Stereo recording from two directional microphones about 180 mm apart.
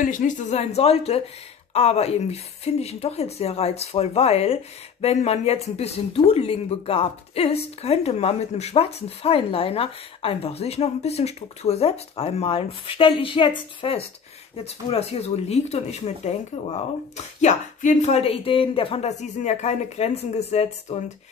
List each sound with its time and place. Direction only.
0.0 s speech: 45° left (ahead or behind)